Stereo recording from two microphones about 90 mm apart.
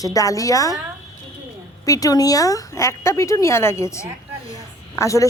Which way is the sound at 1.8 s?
40° left (ahead or behind).